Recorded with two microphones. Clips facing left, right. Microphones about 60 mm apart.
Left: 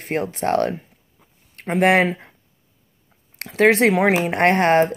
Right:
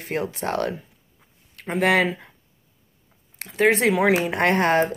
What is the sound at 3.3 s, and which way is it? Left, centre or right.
Speech, left.